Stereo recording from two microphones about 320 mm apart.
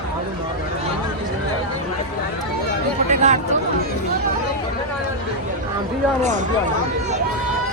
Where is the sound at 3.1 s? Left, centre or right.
Right.